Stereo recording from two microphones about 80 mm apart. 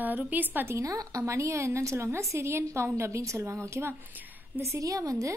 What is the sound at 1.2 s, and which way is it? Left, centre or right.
A woman's voice, right.